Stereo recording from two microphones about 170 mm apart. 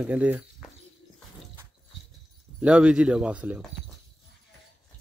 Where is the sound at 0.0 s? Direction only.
10° right (ahead or behind).